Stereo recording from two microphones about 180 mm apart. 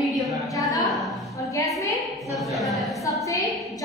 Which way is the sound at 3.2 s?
20° left (ahead or behind).